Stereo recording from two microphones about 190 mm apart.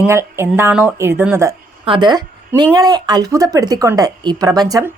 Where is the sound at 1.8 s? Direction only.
25° right (ahead or behind).